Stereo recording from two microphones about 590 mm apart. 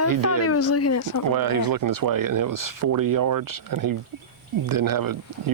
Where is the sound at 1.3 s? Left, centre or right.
Right.